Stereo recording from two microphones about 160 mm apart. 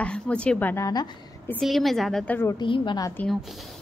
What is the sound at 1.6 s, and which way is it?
Speech, centre (ahead or behind).